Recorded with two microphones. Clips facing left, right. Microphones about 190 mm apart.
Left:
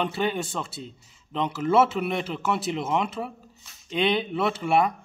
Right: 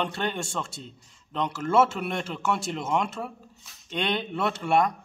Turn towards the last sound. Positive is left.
turn(degrees=5)  # may be behind; listen again after turning